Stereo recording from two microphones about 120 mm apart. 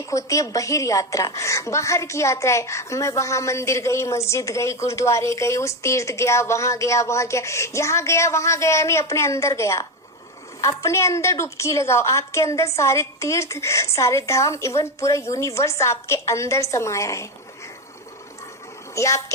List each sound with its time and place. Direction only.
0.0 s a woman's voice: 25° left (ahead or behind)
18.9 s a woman's voice: 25° left (ahead or behind)